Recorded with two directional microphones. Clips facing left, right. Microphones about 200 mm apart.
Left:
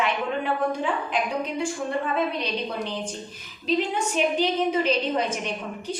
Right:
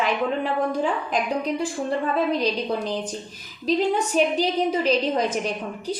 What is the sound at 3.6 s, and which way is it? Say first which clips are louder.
Speech: right 3 dB; 35° right (ahead or behind).